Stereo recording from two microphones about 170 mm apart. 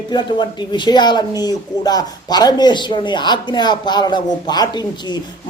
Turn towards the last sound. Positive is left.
turn(degrees=25)  # may be behind; listen again after turning